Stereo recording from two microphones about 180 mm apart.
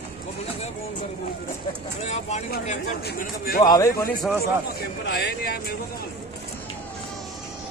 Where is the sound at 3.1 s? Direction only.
60° left (ahead or behind).